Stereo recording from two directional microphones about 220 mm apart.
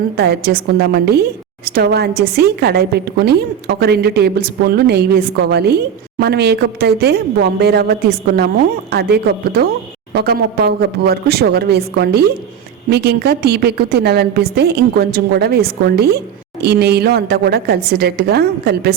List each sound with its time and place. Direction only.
0.2 s a woman's voice: 45° right (ahead or behind)